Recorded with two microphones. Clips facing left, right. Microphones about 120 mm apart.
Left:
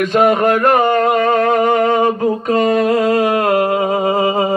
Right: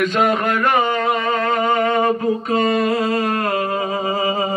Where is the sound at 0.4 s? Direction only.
40° left (ahead or behind).